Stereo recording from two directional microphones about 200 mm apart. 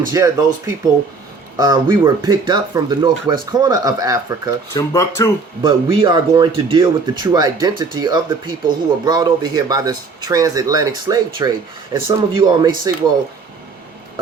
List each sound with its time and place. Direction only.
0.1 s speech: 15° right (ahead or behind)
4.7 s speech: 15° left (ahead or behind)
5.6 s speech: 25° right (ahead or behind)